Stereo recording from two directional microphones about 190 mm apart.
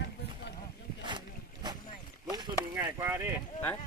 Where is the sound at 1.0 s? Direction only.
20° right (ahead or behind).